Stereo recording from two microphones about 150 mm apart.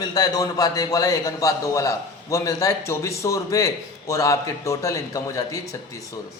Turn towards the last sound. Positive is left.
turn(degrees=20)  # may be behind; listen again after turning